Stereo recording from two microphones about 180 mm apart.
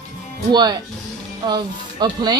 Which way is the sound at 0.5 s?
25° right (ahead or behind).